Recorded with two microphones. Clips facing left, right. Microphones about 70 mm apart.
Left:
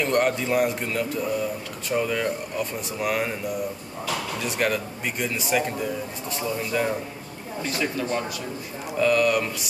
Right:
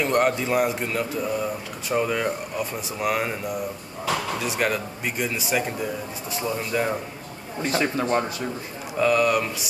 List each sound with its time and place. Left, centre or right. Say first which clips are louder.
0.0 s speech: right 1 dB; centre
7.7 s speech: right 4 dB; right
8.9 s speech: even; centre